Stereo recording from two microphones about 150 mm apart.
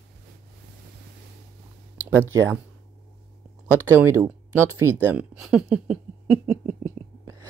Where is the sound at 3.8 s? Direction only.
20° right (ahead or behind).